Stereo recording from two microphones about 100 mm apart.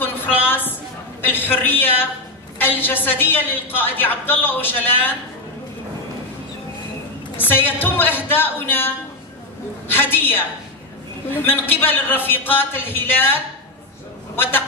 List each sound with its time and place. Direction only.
0.0 s a sound: 20° left (ahead or behind)
1.2 s a woman's voice: 20° left (ahead or behind)
7.3 s a woman's voice: 20° left (ahead or behind)